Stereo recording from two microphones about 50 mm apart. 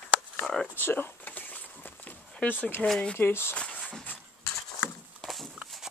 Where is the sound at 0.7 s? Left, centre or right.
Left.